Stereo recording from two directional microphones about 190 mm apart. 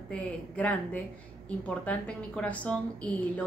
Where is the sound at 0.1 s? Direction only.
5° left (ahead or behind).